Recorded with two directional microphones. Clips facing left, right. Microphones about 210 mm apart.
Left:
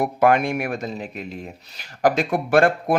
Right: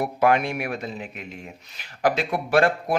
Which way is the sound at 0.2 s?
50° left (ahead or behind).